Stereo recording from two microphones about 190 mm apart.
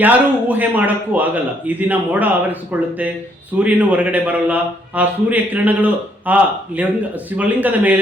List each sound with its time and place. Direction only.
0.0 s a man's voice: 10° right (ahead or behind)
3.6 s a man's voice: 5° right (ahead or behind)